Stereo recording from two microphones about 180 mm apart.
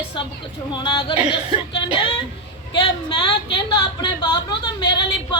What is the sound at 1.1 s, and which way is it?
Speech, 5° right (ahead or behind).